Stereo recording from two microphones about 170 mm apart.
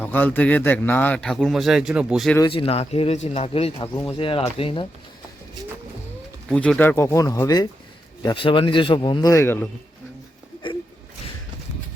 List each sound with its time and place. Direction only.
0.0 s a man's voice: 10° left (ahead or behind)
2.4 s speech: 30° left (ahead or behind)
6.5 s a man's voice: 5° left (ahead or behind); by 9.3 s 25° left (ahead or behind)
9.3 s a man's voice: 15° left (ahead or behind)